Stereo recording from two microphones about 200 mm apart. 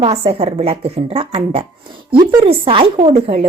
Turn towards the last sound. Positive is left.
turn(degrees=-30)  # may be behind; listen again after turning